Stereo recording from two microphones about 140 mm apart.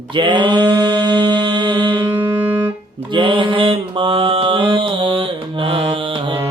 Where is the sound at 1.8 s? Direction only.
35° right (ahead or behind).